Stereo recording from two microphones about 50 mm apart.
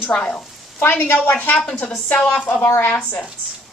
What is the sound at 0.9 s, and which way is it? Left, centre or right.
Speech, left.